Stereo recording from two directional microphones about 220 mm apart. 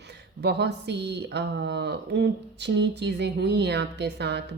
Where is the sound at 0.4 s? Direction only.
50° right (ahead or behind).